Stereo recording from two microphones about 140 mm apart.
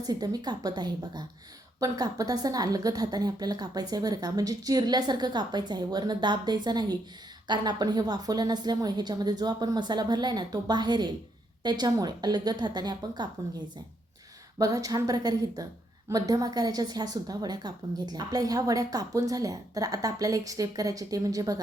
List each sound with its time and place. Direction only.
0.0 s a woman's voice: 30° right (ahead or behind)
14.6 s a woman's voice: 25° right (ahead or behind)